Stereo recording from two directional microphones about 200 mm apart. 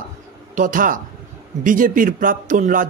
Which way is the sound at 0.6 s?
40° right (ahead or behind).